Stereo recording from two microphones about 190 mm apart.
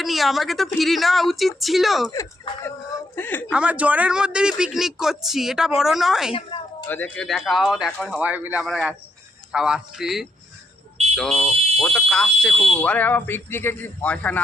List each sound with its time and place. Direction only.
0.0 s speech: centre (ahead or behind)
2.0 s a sound: 15° left (ahead or behind)
3.2 s speech: 10° left (ahead or behind)
3.5 s speech: 5° right (ahead or behind)
6.5 s a sound: 25° left (ahead or behind)
6.8 s speech: 10° left (ahead or behind)
8.2 s speech: 10° right (ahead or behind); by 14.4 s 5° left (ahead or behind)